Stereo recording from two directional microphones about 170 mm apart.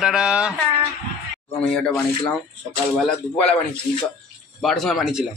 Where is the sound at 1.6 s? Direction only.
5° left (ahead or behind).